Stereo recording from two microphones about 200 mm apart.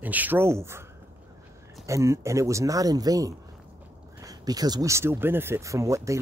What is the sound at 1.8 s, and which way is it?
Speech, 15° right (ahead or behind).